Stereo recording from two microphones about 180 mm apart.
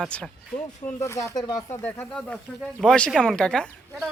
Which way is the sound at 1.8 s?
5° left (ahead or behind).